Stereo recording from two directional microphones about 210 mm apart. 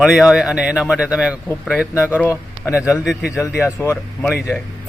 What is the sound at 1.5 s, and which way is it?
Speech, 5° left (ahead or behind).